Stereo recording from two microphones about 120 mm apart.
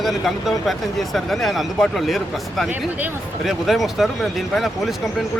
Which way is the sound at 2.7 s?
15° right (ahead or behind).